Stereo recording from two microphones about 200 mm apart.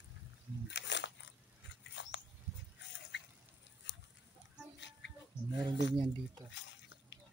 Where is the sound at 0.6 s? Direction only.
60° left (ahead or behind).